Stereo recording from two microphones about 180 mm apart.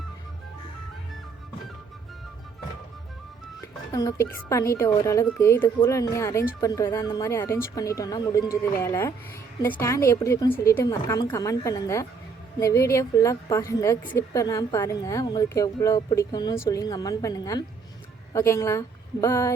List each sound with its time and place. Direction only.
3.6 s a woman's voice: 20° left (ahead or behind)